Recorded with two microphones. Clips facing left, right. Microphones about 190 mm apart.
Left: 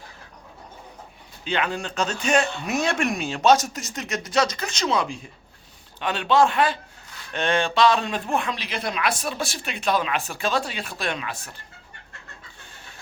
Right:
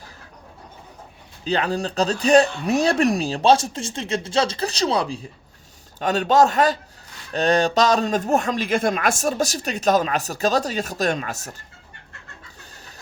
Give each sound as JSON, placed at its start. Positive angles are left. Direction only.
{"t": 1.5, "sound": "a man's voice", "side_deg": -35}
{"t": 12.5, "sound": "chicken", "side_deg": -40}